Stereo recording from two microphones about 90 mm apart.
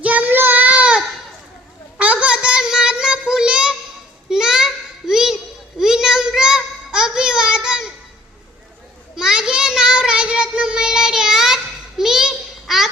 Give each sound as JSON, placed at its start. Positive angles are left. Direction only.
{"t": 0.0, "sound": "child singing", "side_deg": -15}
{"t": 2.2, "sound": "child singing", "side_deg": -10}
{"t": 4.3, "sound": "a sound", "side_deg": -5}
{"t": 9.1, "sound": "child singing", "side_deg": -5}